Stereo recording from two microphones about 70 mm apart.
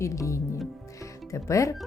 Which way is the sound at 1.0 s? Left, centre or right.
Left.